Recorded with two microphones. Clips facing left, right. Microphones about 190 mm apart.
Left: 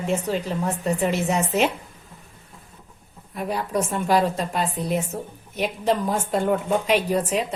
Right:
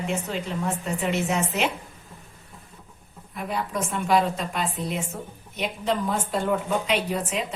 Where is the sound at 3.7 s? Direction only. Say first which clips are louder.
Left 2 dB; 40° left (ahead or behind).